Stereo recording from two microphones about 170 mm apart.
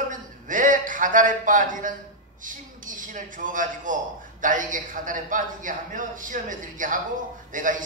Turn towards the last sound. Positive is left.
turn(degrees=-50)  # may be behind; listen again after turning